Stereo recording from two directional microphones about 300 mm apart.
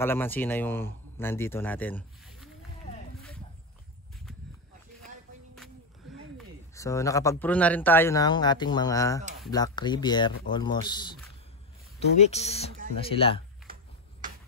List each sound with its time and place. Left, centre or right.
0.0 s speech: centre
6.3 s speech: centre
12.3 s speech: left